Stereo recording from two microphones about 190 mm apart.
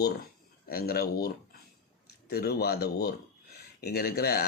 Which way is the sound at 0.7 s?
50° left (ahead or behind).